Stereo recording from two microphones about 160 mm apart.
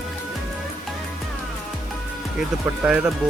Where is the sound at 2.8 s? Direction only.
5° right (ahead or behind).